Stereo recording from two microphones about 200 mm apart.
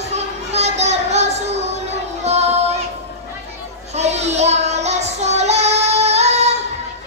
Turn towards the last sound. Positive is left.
turn(degrees=-35)  # may be behind; listen again after turning